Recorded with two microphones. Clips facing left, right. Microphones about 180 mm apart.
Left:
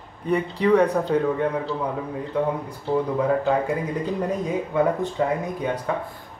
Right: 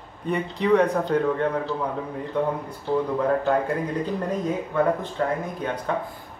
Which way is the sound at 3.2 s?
5° left (ahead or behind).